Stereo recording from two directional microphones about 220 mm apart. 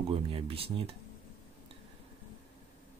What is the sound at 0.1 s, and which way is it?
Speech, 25° right (ahead or behind).